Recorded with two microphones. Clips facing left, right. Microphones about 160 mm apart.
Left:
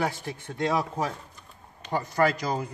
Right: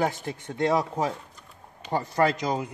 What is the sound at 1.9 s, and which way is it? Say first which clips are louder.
Speech: right 1 dB; 25° right (ahead or behind).